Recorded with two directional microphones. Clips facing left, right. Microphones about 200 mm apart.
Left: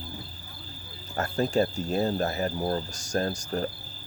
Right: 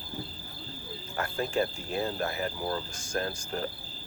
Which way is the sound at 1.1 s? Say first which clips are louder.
Left 5 dB; 40° left (ahead or behind).